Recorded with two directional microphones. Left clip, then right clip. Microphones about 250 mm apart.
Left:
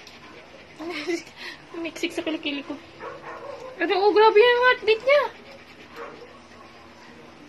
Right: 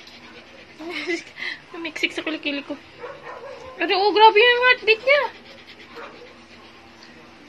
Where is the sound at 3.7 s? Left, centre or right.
Centre.